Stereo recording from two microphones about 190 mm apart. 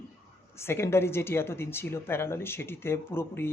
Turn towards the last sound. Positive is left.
turn(degrees=10)  # may be behind; listen again after turning